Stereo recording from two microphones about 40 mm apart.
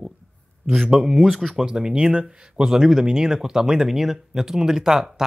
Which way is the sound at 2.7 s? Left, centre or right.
Centre.